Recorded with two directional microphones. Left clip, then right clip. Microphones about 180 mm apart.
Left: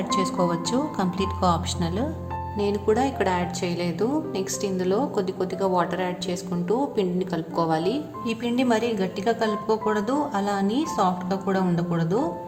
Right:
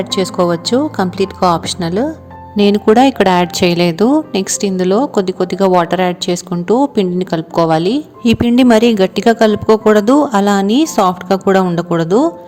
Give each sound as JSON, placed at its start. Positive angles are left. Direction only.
{"t": 0.1, "sound": "a woman's voice", "side_deg": -40}